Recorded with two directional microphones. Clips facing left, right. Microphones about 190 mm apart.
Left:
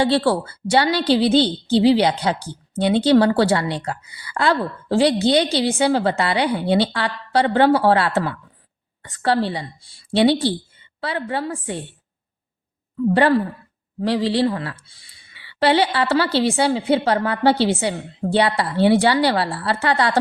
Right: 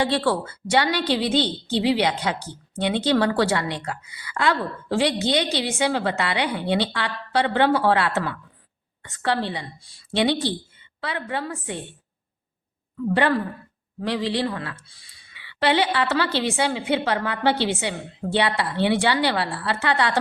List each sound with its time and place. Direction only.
0.0 s a woman's voice: 30° left (ahead or behind)
13.1 s a woman's voice: 35° left (ahead or behind)